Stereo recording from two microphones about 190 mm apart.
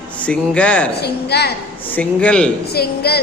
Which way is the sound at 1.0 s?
60° left (ahead or behind).